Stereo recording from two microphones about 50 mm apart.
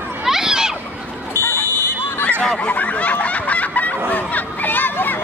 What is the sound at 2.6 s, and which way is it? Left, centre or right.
Snicker, left.